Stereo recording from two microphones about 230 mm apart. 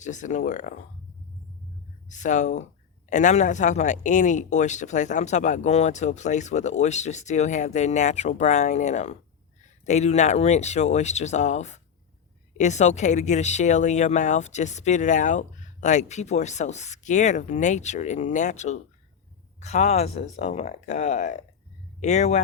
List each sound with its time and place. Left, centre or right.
0.0 s speech: left
2.0 s speech: left